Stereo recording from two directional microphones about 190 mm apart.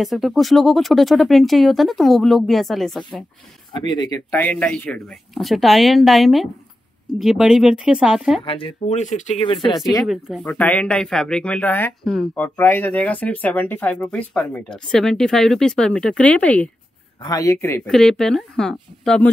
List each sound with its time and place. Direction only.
0.0 s speech: centre (ahead or behind)
3.7 s speech: 25° left (ahead or behind)
4.4 s speech: 10° left (ahead or behind)
8.5 s speech: 30° left (ahead or behind)
9.5 s speech: 25° left (ahead or behind)
10.4 s speech: 10° left (ahead or behind)
17.2 s speech: 20° left (ahead or behind)
17.8 s speech: centre (ahead or behind)